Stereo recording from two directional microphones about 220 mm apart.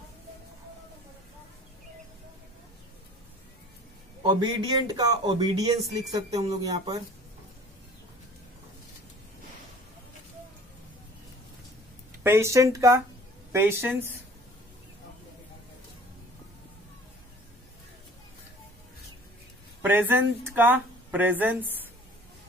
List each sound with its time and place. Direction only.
4.2 s speech: 20° right (ahead or behind)
12.2 s speech: 10° right (ahead or behind)
19.8 s speech: 10° right (ahead or behind)